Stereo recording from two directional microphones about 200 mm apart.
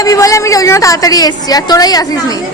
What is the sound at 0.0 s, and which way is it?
A woman's voice, 15° left (ahead or behind).